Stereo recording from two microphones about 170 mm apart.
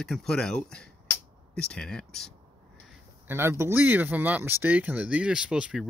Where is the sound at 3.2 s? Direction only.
15° right (ahead or behind).